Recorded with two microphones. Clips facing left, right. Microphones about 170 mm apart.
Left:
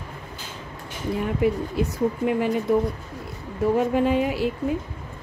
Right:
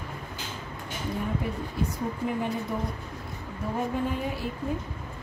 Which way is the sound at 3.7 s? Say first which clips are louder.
Left 7 dB; 90° left.